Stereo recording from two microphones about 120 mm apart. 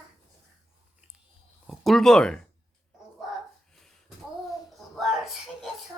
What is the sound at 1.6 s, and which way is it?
Speech, centre (ahead or behind).